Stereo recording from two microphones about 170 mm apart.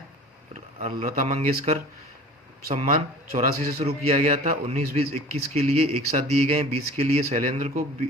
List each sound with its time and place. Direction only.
1.0 s speech: 45° right (ahead or behind)
2.6 s speech: 50° right (ahead or behind)